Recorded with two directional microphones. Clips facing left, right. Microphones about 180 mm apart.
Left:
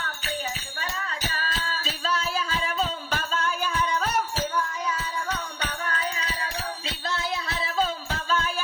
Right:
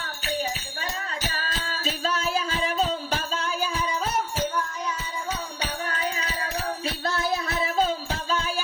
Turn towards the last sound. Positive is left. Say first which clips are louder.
# right 3 dB
turn(degrees=25)  # may be behind; listen again after turning